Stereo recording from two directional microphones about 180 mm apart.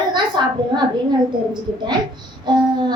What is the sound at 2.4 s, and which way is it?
Speech, 25° right (ahead or behind).